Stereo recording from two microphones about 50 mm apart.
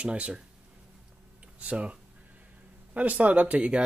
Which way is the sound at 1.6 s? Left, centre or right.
Right.